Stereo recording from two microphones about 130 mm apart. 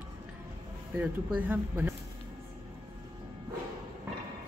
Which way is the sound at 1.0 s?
10° right (ahead or behind).